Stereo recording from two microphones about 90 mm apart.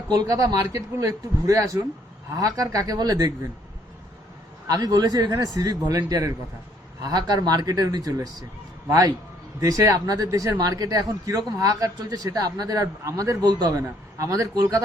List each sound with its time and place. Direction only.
0.1 s a man's voice: 40° right (ahead or behind)
4.6 s a man's voice: 45° right (ahead or behind)
13.4 s a man's voice: 50° right (ahead or behind)